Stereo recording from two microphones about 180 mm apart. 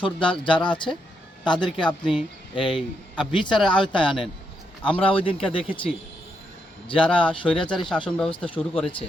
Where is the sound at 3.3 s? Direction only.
25° left (ahead or behind).